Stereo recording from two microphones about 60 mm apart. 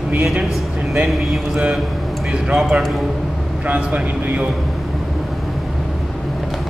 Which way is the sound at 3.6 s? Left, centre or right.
Right.